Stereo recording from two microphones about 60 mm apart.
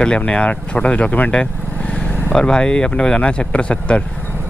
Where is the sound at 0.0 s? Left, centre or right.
Centre.